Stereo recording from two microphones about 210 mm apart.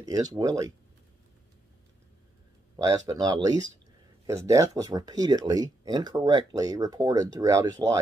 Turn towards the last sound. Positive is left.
turn(degrees=-15)  # may be behind; listen again after turning